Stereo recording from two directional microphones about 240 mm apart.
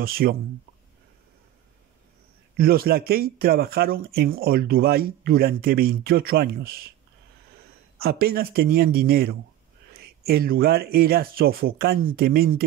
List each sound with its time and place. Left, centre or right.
0.0 s speech: right
2.5 s speech: right
8.0 s speech: right